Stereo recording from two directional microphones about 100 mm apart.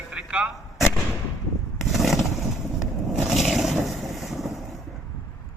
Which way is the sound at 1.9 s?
Centre (ahead or behind).